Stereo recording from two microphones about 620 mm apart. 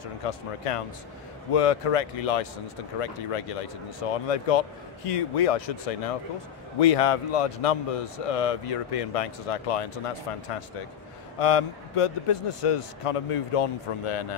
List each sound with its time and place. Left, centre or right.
0.3 s speech: left